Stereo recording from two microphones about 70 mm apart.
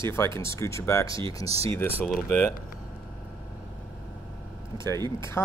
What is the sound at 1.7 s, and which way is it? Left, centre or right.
Speech, left.